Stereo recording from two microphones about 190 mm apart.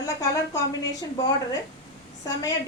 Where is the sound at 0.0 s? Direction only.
20° left (ahead or behind).